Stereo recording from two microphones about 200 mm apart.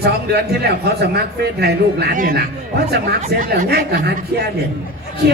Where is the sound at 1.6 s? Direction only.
55° right (ahead or behind).